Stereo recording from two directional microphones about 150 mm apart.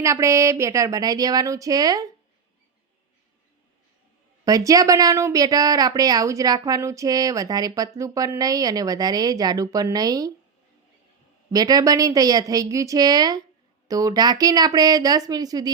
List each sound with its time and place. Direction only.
0.0 s speech: 20° right (ahead or behind)
4.4 s speech: 25° right (ahead or behind)
11.5 s speech: 25° right (ahead or behind)